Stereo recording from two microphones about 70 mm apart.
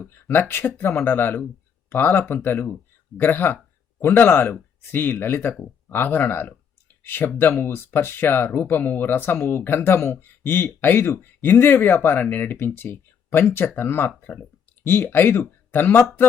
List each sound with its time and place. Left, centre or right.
0.3 s speech: left
14.8 s speech: left